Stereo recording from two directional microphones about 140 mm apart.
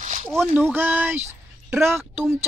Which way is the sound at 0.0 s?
60° right (ahead or behind).